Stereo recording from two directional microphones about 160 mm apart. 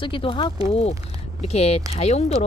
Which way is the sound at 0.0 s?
30° left (ahead or behind).